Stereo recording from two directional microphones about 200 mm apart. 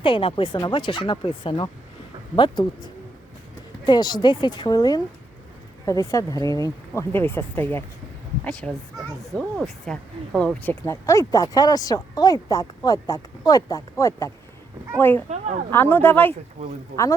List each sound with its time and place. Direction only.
0.0 s speech: 25° left (ahead or behind); by 15.2 s 10° left (ahead or behind)
15.3 s a woman's voice: 35° right (ahead or behind)
15.7 s speech: 10° left (ahead or behind)
16.6 s a woman's voice: 30° right (ahead or behind)